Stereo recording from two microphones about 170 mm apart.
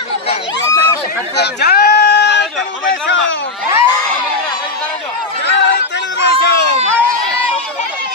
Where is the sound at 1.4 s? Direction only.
75° left (ahead or behind); by 3.4 s 90° left.